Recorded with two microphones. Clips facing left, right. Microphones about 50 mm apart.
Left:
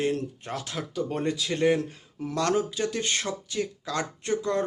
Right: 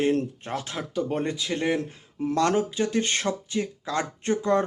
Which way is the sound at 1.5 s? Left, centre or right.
Centre.